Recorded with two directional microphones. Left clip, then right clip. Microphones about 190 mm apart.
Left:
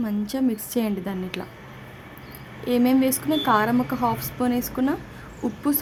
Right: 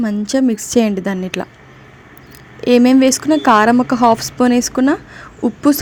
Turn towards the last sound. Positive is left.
turn(degrees=-35)  # may be behind; listen again after turning